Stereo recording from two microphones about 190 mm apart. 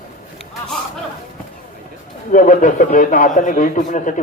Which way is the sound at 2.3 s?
45° left (ahead or behind).